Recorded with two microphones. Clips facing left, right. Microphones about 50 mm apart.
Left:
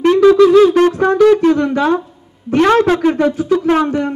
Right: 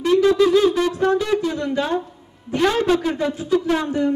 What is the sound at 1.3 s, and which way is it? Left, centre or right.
A man's voice, left.